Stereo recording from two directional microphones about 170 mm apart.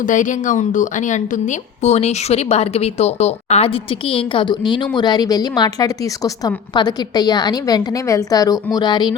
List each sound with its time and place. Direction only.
0.0 s a woman's voice: 50° left (ahead or behind); by 9.1 s 25° left (ahead or behind)